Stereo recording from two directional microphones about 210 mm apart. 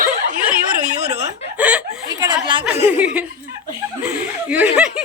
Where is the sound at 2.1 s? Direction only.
20° right (ahead or behind).